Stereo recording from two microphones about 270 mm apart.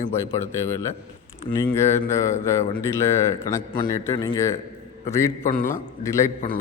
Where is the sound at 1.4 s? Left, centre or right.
Centre.